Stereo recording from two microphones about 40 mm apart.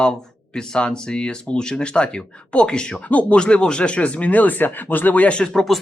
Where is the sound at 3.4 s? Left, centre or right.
Left.